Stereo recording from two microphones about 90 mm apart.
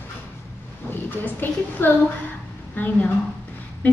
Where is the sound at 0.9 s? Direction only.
20° left (ahead or behind).